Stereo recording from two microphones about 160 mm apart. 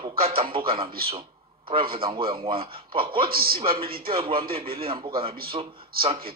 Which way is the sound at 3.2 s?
70° right (ahead or behind).